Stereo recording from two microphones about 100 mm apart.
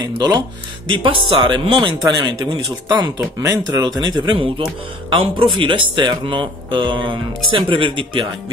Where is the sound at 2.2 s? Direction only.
45° right (ahead or behind).